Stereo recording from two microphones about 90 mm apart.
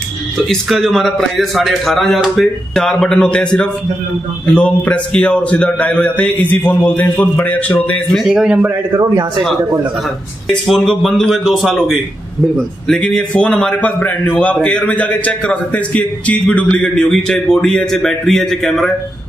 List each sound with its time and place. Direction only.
0.5 s a man's voice: centre (ahead or behind)
4.6 s a man's voice: 15° left (ahead or behind)
8.2 s a man's voice: 10° right (ahead or behind)
10.5 s a man's voice: 5° left (ahead or behind)